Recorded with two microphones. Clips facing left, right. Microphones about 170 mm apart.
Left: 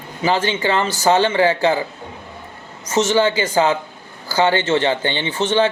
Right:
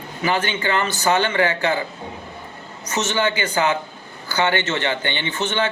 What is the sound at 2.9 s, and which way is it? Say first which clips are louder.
A man's voice: left 6 dB; 30° left (ahead or behind).